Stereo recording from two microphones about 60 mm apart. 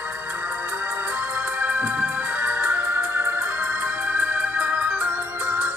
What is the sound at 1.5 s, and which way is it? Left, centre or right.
Music, right.